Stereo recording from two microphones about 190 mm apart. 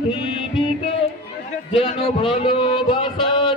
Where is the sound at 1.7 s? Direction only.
30° left (ahead or behind).